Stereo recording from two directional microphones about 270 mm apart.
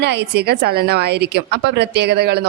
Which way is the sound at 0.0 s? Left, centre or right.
Right.